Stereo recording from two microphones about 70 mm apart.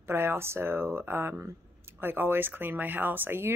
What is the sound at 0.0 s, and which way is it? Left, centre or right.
Speech, right.